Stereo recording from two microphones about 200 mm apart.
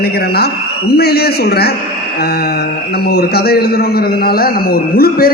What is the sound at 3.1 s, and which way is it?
A man's voice, 50° left (ahead or behind).